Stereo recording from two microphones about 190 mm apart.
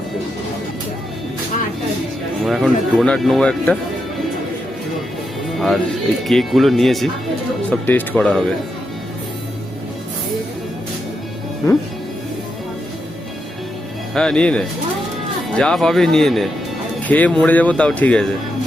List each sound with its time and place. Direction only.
2.4 s speech: centre (ahead or behind)
5.5 s speech: centre (ahead or behind)
14.1 s speech: 5° left (ahead or behind)